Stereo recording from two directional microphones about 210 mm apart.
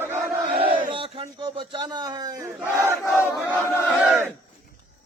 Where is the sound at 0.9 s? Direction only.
25° right (ahead or behind).